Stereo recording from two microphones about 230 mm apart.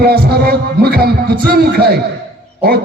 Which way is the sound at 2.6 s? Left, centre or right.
Right.